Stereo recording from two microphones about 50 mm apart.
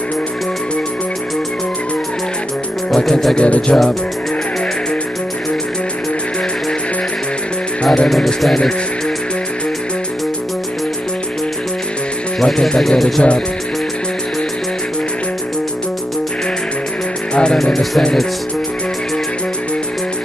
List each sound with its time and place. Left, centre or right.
3.0 s music: centre
3.3 s music: left
7.8 s speech: centre
8.1 s speech: centre
12.4 s speech: centre
17.3 s music: centre